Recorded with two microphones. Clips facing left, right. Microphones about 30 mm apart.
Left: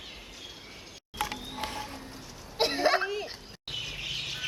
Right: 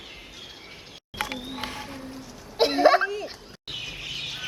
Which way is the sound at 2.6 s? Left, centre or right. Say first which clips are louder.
Right 7 dB; centre.